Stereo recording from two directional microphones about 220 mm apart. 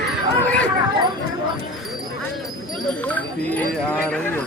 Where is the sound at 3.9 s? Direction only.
5° left (ahead or behind).